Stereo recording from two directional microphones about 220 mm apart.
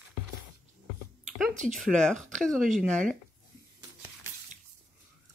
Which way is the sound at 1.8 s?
Centre (ahead or behind).